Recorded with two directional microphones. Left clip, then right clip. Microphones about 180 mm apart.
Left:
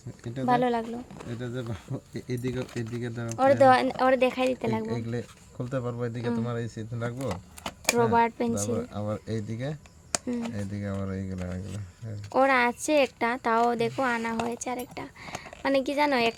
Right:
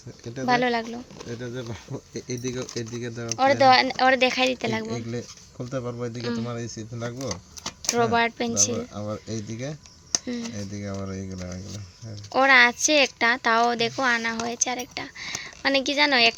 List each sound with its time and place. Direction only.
0.4 s a woman's voice: 10° left (ahead or behind)
1.4 s speech: 45° left (ahead or behind)
3.2 s a woman's voice: 20° left (ahead or behind)
4.9 s speech: 25° left (ahead or behind)
6.1 s a woman's voice: 15° left (ahead or behind)
6.4 s speech: 35° left (ahead or behind)
7.2 s speech: 20° left (ahead or behind)
8.7 s speech: 35° left (ahead or behind)
10.2 s a woman's voice: 15° left (ahead or behind)
10.6 s speech: 35° left (ahead or behind)
12.3 s a woman's voice: 10° left (ahead or behind)